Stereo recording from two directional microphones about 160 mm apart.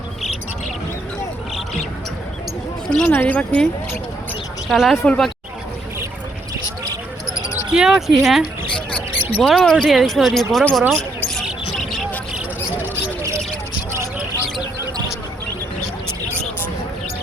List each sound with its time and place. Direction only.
2.8 s speech: 5° left (ahead or behind)
4.7 s speech: centre (ahead or behind)
7.5 s speech: 5° right (ahead or behind)
8.7 s rodents: 10° left (ahead or behind)
9.2 s speech: centre (ahead or behind)
11.4 s vehicle: centre (ahead or behind)
12.7 s a sound: 15° right (ahead or behind)